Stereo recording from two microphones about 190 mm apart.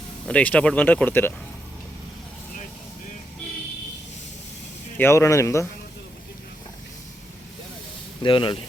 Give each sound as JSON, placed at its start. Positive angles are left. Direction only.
{"t": 0.3, "sound": "speech", "side_deg": 5}
{"t": 4.9, "sound": "speech", "side_deg": 15}
{"t": 8.2, "sound": "speech", "side_deg": 25}